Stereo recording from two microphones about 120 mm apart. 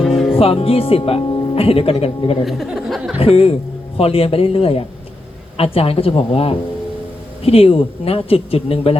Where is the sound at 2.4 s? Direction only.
Centre (ahead or behind).